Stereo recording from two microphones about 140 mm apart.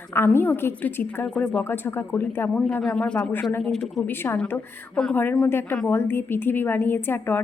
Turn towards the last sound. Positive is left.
turn(degrees=15)  # may be behind; listen again after turning